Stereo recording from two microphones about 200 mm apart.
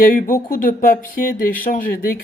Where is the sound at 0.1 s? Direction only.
45° left (ahead or behind).